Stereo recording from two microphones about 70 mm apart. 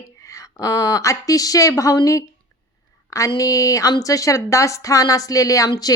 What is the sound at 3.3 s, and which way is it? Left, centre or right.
Speech, left.